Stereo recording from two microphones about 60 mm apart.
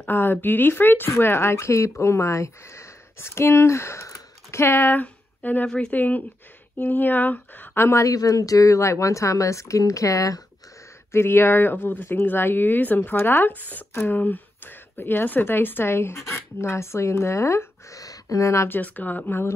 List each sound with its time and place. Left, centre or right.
0.0 s speech: left
1.1 s speech: left
5.0 s a sound: left
5.7 s speech: centre
5.9 s speech: left
7.8 s speech: left
8.1 s speech: left
11.1 s speech: left
17.9 s speech: left
18.7 s speech: left